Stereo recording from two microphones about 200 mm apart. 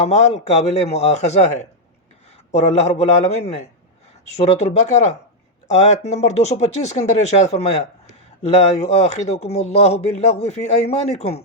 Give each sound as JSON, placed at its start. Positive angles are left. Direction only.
{"t": 0.0, "sound": "speech", "side_deg": 35}
{"t": 9.0, "sound": "speech", "side_deg": 35}